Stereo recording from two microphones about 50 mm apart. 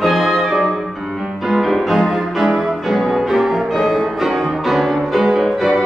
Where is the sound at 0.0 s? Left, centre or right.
Centre.